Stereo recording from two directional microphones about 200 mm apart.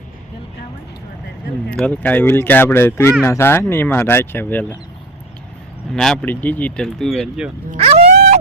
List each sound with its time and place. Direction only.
1.7 s speech: 5° left (ahead or behind)
5.9 s speech: centre (ahead or behind)
7.8 s a sound: 30° right (ahead or behind)